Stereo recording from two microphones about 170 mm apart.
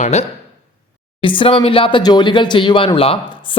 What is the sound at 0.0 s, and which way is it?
Speech, 40° left (ahead or behind).